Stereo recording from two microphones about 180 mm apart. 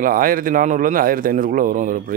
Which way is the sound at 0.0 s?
50° right (ahead or behind).